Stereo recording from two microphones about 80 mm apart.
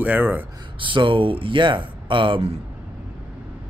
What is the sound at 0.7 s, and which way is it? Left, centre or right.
Speech, right.